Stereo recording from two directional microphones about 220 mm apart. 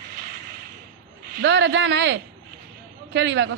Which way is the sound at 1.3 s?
55° right (ahead or behind).